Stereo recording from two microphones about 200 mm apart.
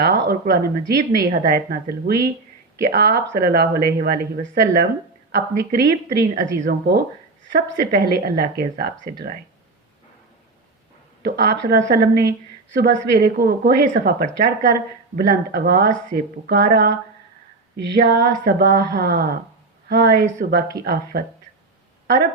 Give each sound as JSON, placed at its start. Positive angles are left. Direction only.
{"t": 0.0, "sound": "a woman's voice", "side_deg": -55}
{"t": 6.1, "sound": "a woman's voice", "side_deg": -40}
{"t": 7.5, "sound": "a woman's voice", "side_deg": -55}
{"t": 11.2, "sound": "a woman's voice", "side_deg": -55}
{"t": 18.2, "sound": "a woman's voice", "side_deg": -55}